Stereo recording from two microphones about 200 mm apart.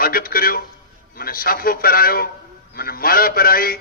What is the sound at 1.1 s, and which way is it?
A man's voice, 45° left (ahead or behind).